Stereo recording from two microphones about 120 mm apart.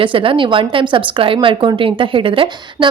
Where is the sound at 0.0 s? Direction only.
50° right (ahead or behind).